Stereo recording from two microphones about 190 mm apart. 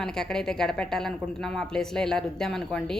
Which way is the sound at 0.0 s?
5° left (ahead or behind).